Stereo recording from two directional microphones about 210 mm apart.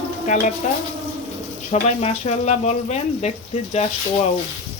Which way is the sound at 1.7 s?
30° left (ahead or behind).